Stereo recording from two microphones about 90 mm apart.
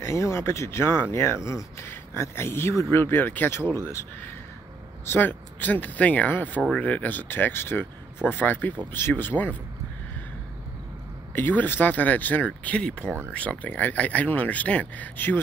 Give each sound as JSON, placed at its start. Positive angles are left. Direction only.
{"t": 0.0, "sound": "speech", "side_deg": 30}
{"t": 5.0, "sound": "speech", "side_deg": 20}
{"t": 11.3, "sound": "speech", "side_deg": 25}